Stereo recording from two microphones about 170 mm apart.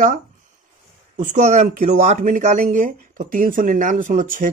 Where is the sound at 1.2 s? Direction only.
45° right (ahead or behind).